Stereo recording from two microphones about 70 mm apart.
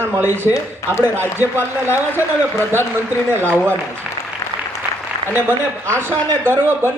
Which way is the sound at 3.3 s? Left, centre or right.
Right.